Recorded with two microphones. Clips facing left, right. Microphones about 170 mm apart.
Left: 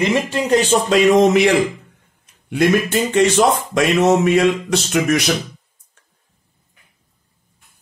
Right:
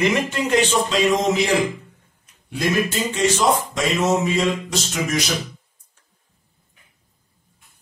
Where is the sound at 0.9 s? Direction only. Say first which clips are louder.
Left 7 dB; 65° left (ahead or behind).